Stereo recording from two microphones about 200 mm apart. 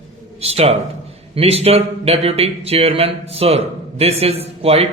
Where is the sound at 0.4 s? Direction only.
30° right (ahead or behind).